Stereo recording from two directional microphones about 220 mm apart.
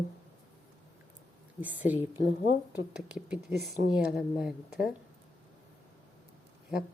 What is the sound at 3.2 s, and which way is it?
Speech, 5° right (ahead or behind).